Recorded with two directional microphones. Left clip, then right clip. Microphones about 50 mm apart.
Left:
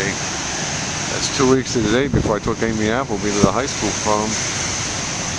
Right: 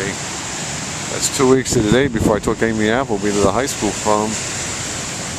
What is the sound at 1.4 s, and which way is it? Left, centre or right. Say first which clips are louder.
Speech: right 3 dB; right.